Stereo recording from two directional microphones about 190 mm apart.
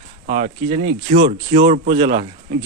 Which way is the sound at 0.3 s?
35° right (ahead or behind).